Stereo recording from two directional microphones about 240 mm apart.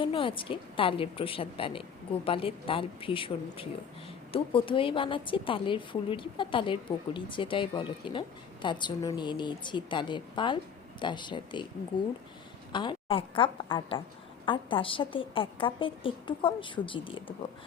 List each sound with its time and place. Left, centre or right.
0.0 s a woman's voice: left
12.7 s a woman's voice: centre